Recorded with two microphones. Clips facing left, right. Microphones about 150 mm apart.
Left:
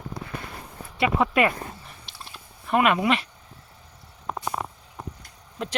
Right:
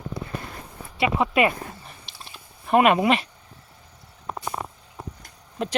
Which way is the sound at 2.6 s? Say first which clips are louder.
Right 3 dB; 25° right (ahead or behind).